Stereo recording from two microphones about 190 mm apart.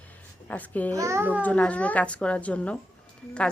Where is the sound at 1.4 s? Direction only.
10° left (ahead or behind).